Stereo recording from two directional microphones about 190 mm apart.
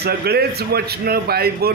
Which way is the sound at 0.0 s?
55° right (ahead or behind).